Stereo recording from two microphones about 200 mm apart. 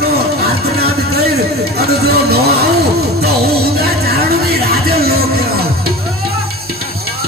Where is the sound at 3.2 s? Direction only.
50° right (ahead or behind).